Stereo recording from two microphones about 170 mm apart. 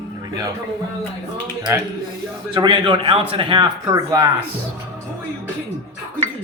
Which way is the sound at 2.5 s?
30° right (ahead or behind).